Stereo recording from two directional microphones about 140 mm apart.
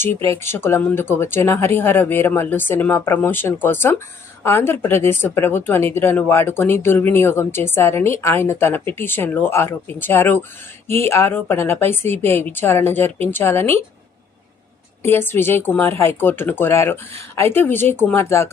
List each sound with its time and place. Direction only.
0.3 s speech: 15° left (ahead or behind)
15.0 s speech: 15° left (ahead or behind)